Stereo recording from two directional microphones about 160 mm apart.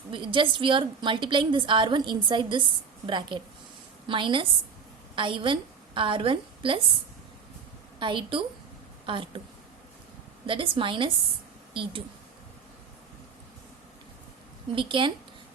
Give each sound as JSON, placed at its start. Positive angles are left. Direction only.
{"t": 0.1, "sound": "a woman's voice", "side_deg": -30}
{"t": 7.9, "sound": "a woman's voice", "side_deg": -30}
{"t": 10.4, "sound": "a woman's voice", "side_deg": -30}
{"t": 14.8, "sound": "a woman's voice", "side_deg": -30}